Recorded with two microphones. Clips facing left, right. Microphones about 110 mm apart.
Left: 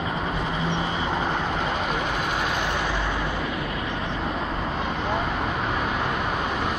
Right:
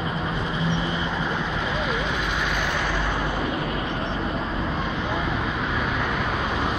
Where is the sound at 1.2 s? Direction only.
50° left (ahead or behind).